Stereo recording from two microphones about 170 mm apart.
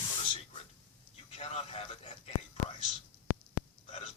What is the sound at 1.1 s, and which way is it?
A man's voice, 35° left (ahead or behind).